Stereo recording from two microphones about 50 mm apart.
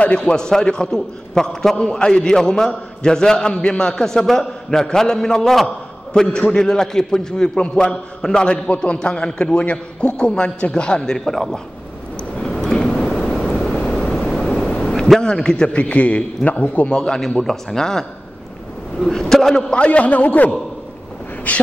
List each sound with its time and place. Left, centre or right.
0.0 s a man's voice: centre
12.4 s vehicle: centre
15.2 s a man's voice: centre
15.7 s a man's voice: left
16.9 s a man's voice: centre
19.0 s a man's voice: centre
19.7 s a man's voice: left